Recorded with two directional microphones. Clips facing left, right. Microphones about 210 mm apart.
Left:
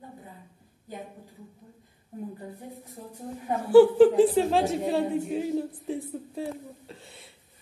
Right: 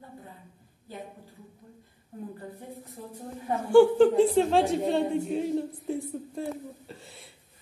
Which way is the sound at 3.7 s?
5° left (ahead or behind).